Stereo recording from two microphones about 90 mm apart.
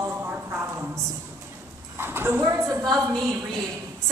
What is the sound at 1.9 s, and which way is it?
A woman's voice, 25° right (ahead or behind).